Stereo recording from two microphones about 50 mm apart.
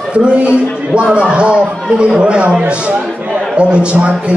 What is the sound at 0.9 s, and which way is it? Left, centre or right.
A man's voice, right.